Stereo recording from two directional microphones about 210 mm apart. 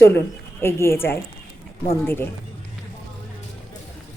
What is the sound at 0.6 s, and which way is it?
A woman's voice, 10° left (ahead or behind).